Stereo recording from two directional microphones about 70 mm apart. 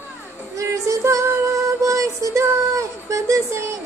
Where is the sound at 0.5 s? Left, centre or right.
Right.